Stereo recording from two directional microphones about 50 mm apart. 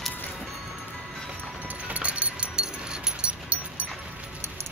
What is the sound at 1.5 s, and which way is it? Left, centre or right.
Music, right.